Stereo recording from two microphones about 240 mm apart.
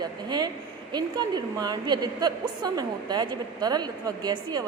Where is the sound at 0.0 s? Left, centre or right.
Centre.